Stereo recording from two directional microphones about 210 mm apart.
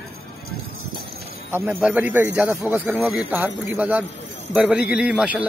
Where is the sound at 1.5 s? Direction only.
10° right (ahead or behind).